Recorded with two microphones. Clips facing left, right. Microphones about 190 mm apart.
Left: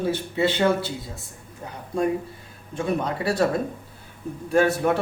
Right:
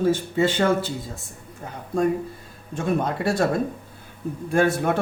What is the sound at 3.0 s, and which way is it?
Speech, 50° right (ahead or behind).